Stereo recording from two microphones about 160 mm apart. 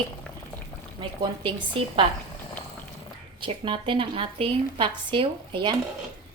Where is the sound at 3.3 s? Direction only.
30° right (ahead or behind).